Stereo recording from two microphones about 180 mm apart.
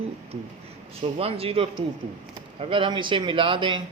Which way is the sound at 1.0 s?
35° right (ahead or behind).